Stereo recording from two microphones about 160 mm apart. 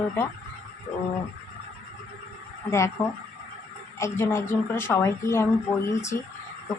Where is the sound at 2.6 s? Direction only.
15° left (ahead or behind).